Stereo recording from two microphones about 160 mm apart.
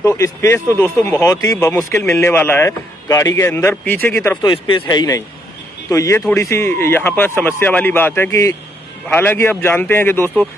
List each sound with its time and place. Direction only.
0.0 s a man's voice: 15° left (ahead or behind)
4.5 s a man's voice: 30° left (ahead or behind); by 10.4 s 15° left (ahead or behind)